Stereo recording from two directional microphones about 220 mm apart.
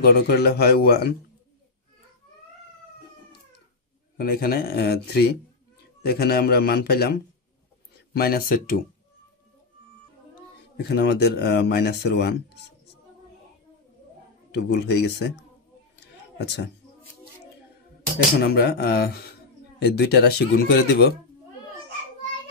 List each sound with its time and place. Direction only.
0.0 s speech: 45° left (ahead or behind)
4.2 s speech: 45° left (ahead or behind)
10.8 s speech: 50° left (ahead or behind)
14.5 s speech: 50° left (ahead or behind)
16.3 s a woman's voice: 50° left (ahead or behind)
18.5 s speech: 45° left (ahead or behind)